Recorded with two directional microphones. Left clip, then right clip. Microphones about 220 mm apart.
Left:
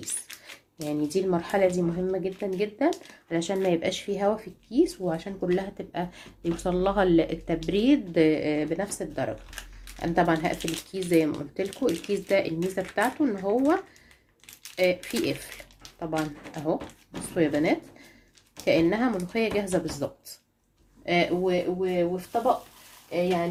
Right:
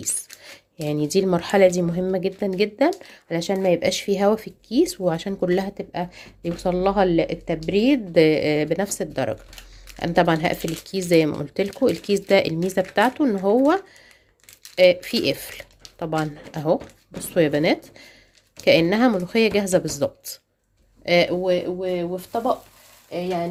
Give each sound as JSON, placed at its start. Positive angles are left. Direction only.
{"t": 0.8, "sound": "speech", "side_deg": -45}
{"t": 14.8, "sound": "speech", "side_deg": -45}
{"t": 21.0, "sound": "speech", "side_deg": -40}